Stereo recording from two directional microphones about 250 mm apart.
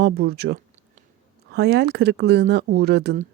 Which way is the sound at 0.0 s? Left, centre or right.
Right.